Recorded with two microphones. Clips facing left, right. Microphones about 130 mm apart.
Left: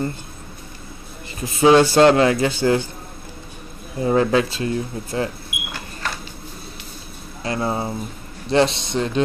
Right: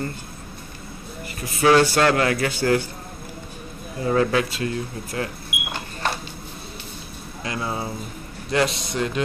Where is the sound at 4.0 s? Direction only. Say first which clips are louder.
Left 3 dB; 25° left (ahead or behind).